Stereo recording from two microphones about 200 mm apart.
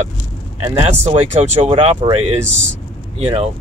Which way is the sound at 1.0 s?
30° right (ahead or behind).